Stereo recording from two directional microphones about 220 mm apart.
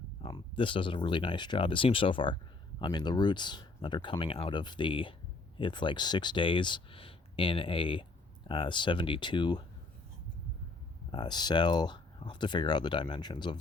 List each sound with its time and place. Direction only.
0.2 s speech: 20° left (ahead or behind)
11.1 s speech: 20° left (ahead or behind)